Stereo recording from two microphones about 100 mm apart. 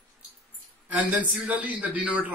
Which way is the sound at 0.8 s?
15° right (ahead or behind).